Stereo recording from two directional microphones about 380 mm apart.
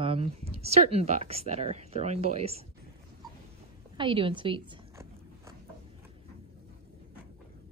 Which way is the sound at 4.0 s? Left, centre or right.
Centre.